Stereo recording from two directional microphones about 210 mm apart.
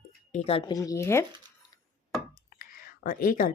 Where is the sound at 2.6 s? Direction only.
45° left (ahead or behind).